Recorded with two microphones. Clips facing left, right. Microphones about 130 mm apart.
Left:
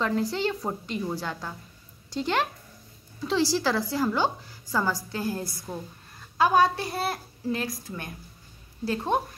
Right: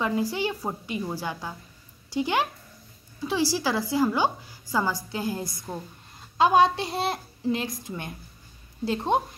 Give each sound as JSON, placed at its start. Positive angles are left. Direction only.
{"t": 0.0, "sound": "a woman's voice", "side_deg": -10}
{"t": 3.5, "sound": "a woman's voice", "side_deg": -10}